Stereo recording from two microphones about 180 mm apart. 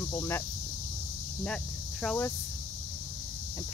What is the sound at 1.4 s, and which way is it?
Speech, 5° left (ahead or behind).